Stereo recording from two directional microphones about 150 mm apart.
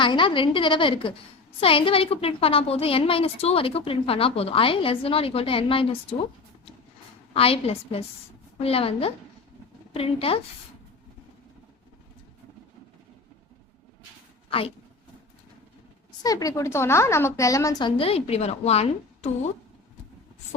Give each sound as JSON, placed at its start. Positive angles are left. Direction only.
{"t": 0.0, "sound": "a woman's voice", "side_deg": 35}
{"t": 7.3, "sound": "a woman's voice", "side_deg": 40}
{"t": 16.2, "sound": "a woman's voice", "side_deg": 25}